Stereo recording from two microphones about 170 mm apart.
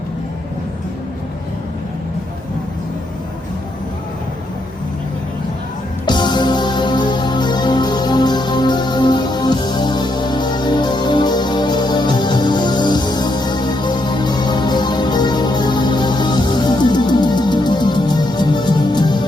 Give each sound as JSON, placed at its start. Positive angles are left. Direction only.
{"t": 6.1, "sound": "music", "side_deg": 25}